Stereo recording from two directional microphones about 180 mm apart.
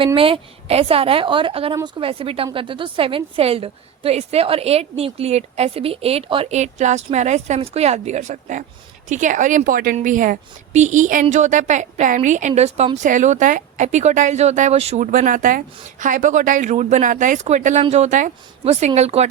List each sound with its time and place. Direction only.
0.0 s a woman's voice: 30° right (ahead or behind)